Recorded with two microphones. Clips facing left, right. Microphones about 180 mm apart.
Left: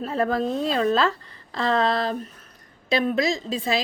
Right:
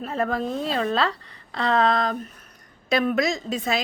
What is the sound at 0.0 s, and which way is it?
A woman's voice, 35° left (ahead or behind).